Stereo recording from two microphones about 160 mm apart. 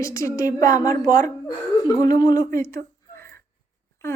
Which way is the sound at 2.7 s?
15° left (ahead or behind).